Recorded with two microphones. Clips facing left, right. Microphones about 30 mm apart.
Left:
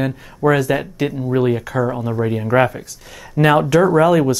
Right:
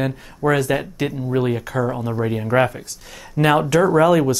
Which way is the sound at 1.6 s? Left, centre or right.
Left.